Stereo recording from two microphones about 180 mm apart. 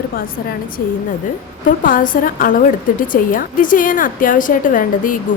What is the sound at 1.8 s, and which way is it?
A woman's voice, 50° left (ahead or behind).